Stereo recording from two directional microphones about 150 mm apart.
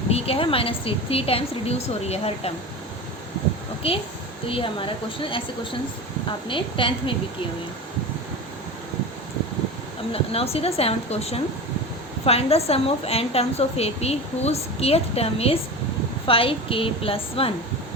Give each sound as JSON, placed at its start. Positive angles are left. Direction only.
{"t": 0.1, "sound": "a woman's voice", "side_deg": 40}
{"t": 3.8, "sound": "a woman's voice", "side_deg": 40}
{"t": 6.5, "sound": "a woman's voice", "side_deg": 35}
{"t": 10.1, "sound": "a woman's voice", "side_deg": 40}